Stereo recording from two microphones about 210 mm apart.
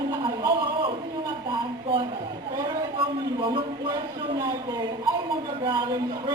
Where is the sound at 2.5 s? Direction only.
15° right (ahead or behind).